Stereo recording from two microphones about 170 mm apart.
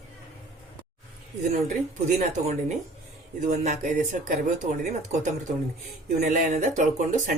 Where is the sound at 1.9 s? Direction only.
45° right (ahead or behind).